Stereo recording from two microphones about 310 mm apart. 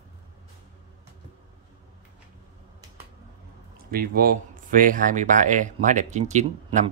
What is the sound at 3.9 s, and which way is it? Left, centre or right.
Speech, right.